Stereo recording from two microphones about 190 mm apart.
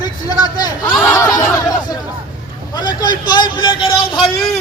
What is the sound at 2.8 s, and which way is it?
Speech, 20° left (ahead or behind).